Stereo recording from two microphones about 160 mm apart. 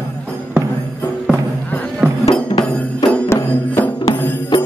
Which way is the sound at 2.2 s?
40° left (ahead or behind).